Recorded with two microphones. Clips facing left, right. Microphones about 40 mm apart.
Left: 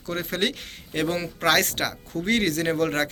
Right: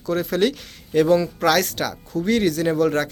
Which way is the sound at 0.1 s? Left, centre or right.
Left.